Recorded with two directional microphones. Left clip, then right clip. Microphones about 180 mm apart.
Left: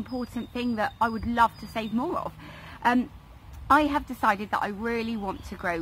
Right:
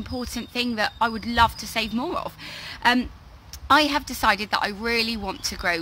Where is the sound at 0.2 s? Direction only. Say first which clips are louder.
Right 8 dB; 20° right (ahead or behind).